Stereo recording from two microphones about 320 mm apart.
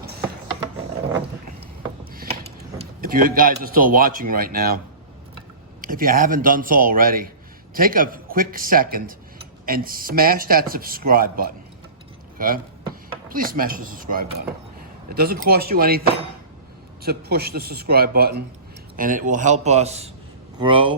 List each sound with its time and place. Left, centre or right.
2.1 s a sound: centre
3.0 s speech: right
5.8 s speech: right
17.0 s speech: right